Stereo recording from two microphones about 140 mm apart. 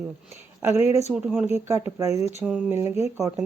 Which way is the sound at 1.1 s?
5° right (ahead or behind).